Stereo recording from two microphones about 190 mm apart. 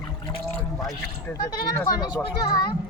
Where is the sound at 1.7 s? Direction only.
20° left (ahead or behind).